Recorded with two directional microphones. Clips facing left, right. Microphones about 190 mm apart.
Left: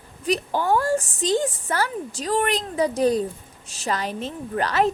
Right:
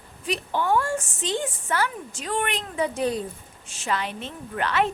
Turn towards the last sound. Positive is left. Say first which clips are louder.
# left 3 dB
turn(degrees=40)  # may be behind; listen again after turning